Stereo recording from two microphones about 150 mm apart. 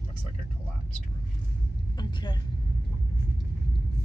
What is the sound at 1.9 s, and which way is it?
Speech, 30° left (ahead or behind).